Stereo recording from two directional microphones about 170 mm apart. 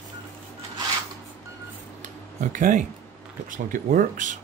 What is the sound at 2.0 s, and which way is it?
Tick-tock, 50° right (ahead or behind).